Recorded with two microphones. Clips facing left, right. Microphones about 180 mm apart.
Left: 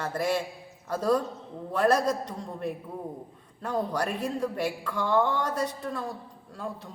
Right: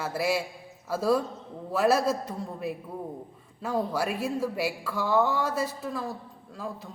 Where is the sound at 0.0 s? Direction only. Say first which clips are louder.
Even; 5° right (ahead or behind).